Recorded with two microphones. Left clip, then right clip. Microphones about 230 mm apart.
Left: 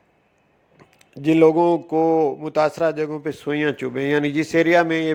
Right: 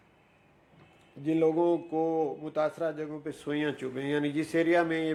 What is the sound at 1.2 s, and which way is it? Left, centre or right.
Speech, left.